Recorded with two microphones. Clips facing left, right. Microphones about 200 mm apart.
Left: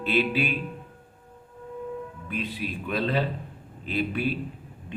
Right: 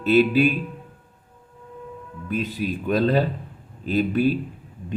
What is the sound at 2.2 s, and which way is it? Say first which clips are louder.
A man's voice: right 8 dB; 40° right (ahead or behind).